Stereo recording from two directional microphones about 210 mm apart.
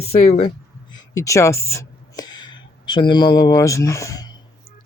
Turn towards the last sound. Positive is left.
turn(degrees=20)  # may be behind; listen again after turning